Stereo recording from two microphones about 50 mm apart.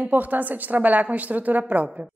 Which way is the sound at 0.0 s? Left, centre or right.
Right.